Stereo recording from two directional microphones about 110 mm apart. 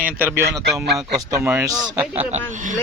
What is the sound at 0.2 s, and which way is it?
Speech, 20° right (ahead or behind).